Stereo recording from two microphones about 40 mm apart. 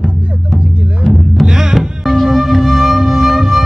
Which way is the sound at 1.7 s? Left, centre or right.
Centre.